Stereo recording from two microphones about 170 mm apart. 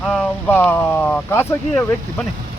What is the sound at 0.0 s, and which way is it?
Speech, 5° left (ahead or behind).